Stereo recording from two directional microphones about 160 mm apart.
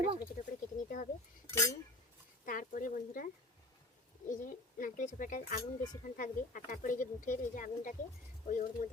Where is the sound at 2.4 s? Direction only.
55° left (ahead or behind).